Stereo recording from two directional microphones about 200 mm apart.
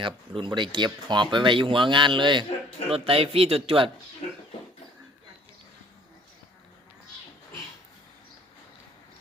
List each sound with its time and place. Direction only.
0.0 s speech: 25° right (ahead or behind)